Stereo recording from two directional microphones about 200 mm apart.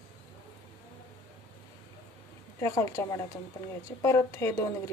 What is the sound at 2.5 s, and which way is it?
Speech, 15° left (ahead or behind).